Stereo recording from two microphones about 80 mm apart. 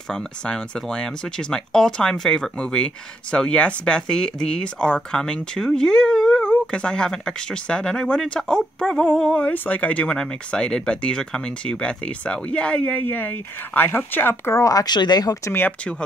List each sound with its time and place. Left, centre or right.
0.1 s speech: centre; by 14.5 s left
14.5 s speech: left